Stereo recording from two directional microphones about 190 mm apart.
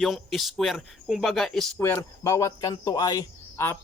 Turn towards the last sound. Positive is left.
turn(degrees=10)  # may be behind; listen again after turning